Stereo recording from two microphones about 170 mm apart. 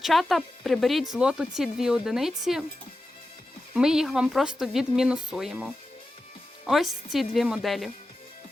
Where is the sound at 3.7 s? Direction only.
5° right (ahead or behind).